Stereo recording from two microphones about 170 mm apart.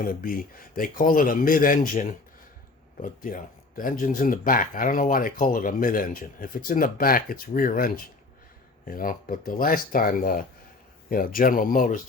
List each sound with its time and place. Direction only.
0.0 s speech: 55° left (ahead or behind)